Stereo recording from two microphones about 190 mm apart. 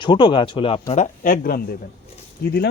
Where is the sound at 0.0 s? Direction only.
25° left (ahead or behind).